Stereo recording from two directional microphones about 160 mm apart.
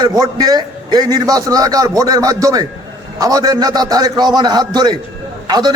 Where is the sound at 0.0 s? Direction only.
25° right (ahead or behind).